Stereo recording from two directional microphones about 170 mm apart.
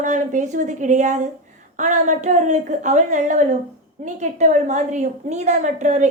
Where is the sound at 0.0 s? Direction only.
45° right (ahead or behind).